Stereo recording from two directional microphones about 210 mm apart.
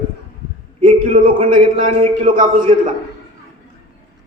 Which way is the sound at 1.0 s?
40° right (ahead or behind).